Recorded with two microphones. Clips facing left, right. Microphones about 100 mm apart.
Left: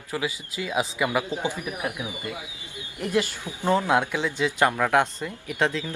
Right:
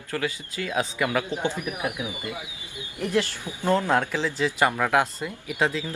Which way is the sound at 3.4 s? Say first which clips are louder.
Even; 15° left (ahead or behind).